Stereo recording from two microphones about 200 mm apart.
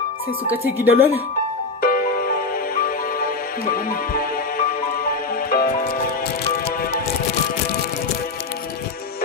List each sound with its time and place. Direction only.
0.9 s speech: 10° right (ahead or behind)
1.8 s music: 45° left (ahead or behind)